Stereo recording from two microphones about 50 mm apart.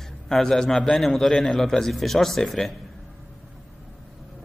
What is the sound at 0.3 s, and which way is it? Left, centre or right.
A man's voice, centre.